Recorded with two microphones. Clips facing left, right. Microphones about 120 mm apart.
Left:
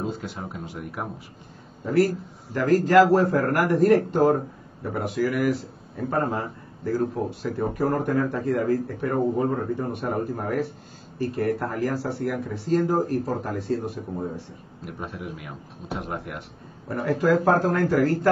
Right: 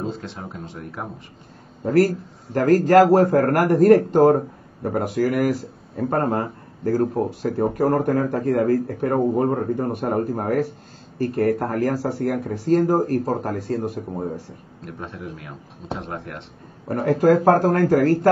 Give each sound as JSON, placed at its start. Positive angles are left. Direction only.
{"t": 0.0, "sound": "speech", "side_deg": 5}
{"t": 2.5, "sound": "speech", "side_deg": -45}
{"t": 14.9, "sound": "a man's voice", "side_deg": 5}
{"t": 16.8, "sound": "a man's voice", "side_deg": -45}